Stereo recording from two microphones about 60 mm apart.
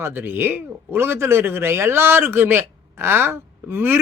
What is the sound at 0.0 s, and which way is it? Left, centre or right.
Speech, right.